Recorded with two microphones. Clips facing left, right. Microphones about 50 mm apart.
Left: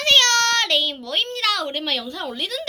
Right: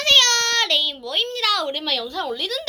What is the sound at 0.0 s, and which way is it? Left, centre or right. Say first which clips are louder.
Child singing: left 1 dB; left.